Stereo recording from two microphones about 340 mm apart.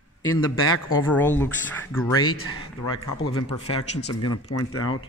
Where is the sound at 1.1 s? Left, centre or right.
Centre.